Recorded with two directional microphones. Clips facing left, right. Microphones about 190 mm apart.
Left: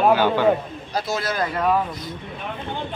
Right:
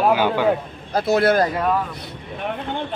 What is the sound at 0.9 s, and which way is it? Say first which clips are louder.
Speech: right 9 dB; 60° right (ahead or behind).